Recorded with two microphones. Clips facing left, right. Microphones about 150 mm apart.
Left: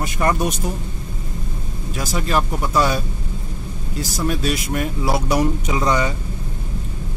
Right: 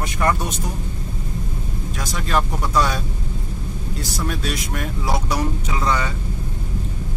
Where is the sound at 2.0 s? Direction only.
5° left (ahead or behind).